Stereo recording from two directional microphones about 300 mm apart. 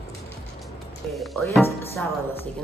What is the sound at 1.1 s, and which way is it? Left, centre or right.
Speech, centre.